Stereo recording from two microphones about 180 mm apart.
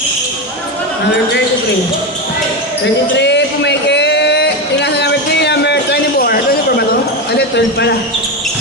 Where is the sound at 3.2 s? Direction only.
75° left (ahead or behind); by 6.8 s 55° left (ahead or behind).